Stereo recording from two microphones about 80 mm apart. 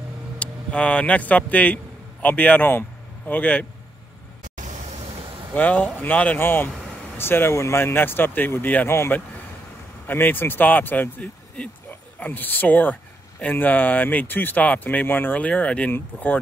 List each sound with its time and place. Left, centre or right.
0.4 s speech: centre
5.5 s a man's voice: centre